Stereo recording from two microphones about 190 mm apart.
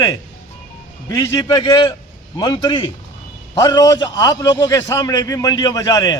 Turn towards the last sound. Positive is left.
turn(degrees=20)  # may be behind; listen again after turning